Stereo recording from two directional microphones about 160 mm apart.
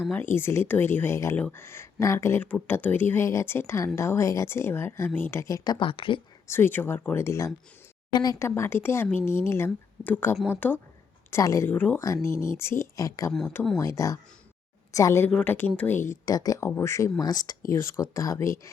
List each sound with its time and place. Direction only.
0.1 s speech: 15° left (ahead or behind); by 6.2 s 30° left (ahead or behind)
6.5 s speech: 15° left (ahead or behind)
15.3 s speech: 10° left (ahead or behind)